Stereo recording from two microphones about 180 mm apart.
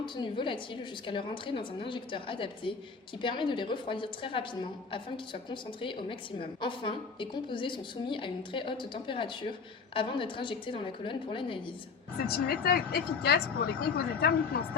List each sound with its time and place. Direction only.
0.0 s a woman's voice: 25° left (ahead or behind)
12.2 s speech: 60° left (ahead or behind)